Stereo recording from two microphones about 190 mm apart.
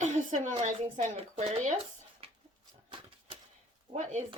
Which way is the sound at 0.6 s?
40° right (ahead or behind).